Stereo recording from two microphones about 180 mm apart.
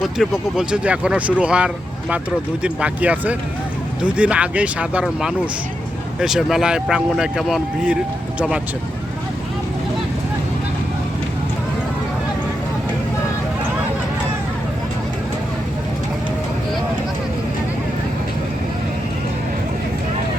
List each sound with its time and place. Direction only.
0.0 s speech: centre (ahead or behind)